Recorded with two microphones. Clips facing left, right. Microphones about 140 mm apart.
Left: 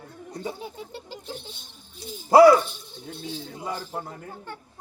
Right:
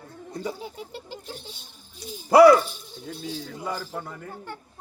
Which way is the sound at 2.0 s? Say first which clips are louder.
Even; 25° left (ahead or behind).